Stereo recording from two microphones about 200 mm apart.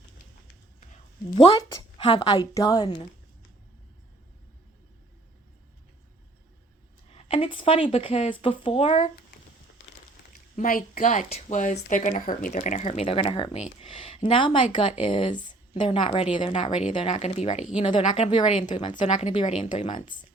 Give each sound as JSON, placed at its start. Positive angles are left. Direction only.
{"t": 1.5, "sound": "speech", "side_deg": 20}
{"t": 7.1, "sound": "speech", "side_deg": 30}
{"t": 10.5, "sound": "speech", "side_deg": 45}